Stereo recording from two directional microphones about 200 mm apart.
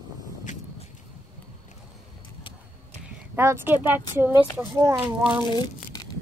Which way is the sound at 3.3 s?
10° right (ahead or behind).